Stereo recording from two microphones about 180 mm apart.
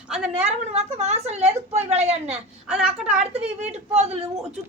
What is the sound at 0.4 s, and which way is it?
A woman's voice, 35° right (ahead or behind).